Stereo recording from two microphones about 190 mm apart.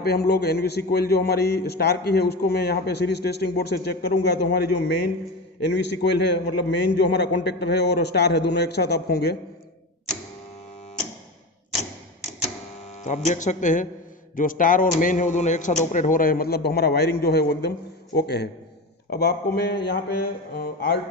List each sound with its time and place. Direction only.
0.0 s a man's voice: 55° left (ahead or behind)
5.7 s a man's voice: 65° left (ahead or behind)
13.0 s a man's voice: 40° left (ahead or behind); by 21.0 s 55° left (ahead or behind)